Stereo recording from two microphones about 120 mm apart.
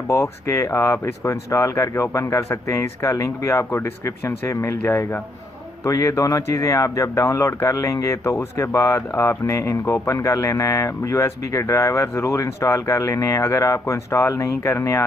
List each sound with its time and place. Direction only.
0.1 s speech: 25° left (ahead or behind)